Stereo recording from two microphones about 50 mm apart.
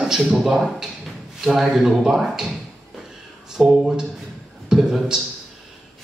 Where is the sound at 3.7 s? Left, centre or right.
Centre.